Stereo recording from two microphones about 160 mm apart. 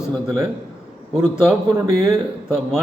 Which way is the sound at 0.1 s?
Centre (ahead or behind).